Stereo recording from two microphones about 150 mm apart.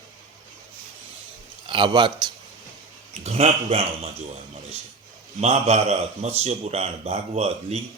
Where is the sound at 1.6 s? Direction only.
35° right (ahead or behind).